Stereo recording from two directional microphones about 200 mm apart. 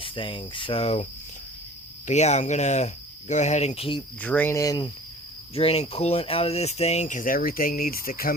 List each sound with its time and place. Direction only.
0.0 s speech: 25° left (ahead or behind)
2.0 s speech: 35° left (ahead or behind)
4.2 s speech: 10° left (ahead or behind)
5.5 s speech: 30° left (ahead or behind); by 8.3 s 45° left (ahead or behind)